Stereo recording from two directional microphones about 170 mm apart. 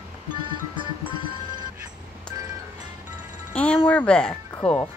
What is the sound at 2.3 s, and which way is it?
Music, 15° right (ahead or behind).